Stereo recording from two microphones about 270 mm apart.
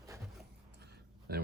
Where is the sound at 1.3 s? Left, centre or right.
Right.